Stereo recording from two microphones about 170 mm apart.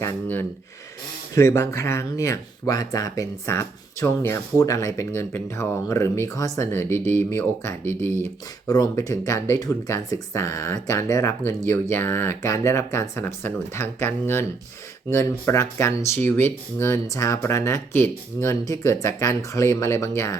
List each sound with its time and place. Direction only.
0.0 s speech: 15° left (ahead or behind)